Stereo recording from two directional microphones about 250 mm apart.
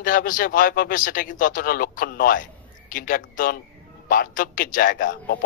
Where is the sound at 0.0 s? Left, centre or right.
Left.